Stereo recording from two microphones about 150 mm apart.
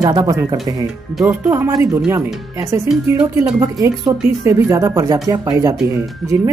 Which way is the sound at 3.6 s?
20° right (ahead or behind).